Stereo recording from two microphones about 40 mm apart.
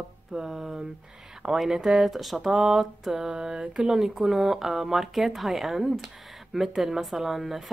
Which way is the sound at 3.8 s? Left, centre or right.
Centre.